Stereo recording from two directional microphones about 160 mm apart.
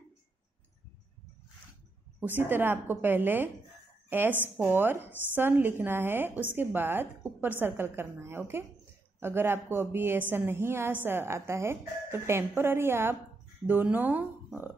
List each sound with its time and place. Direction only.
2.1 s a woman's voice: 10° right (ahead or behind)